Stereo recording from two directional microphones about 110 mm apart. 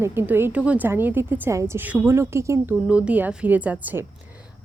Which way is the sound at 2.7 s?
10° right (ahead or behind).